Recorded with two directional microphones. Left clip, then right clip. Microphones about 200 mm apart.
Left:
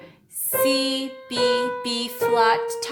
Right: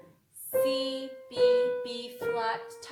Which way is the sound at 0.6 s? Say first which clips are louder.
Left 8 dB; 35° left (ahead or behind).